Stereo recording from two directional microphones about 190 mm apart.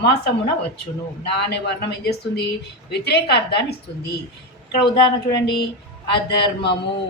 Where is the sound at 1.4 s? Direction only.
60° left (ahead or behind).